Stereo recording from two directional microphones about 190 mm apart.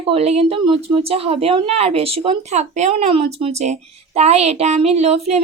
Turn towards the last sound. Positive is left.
turn(degrees=-35)  # may be behind; listen again after turning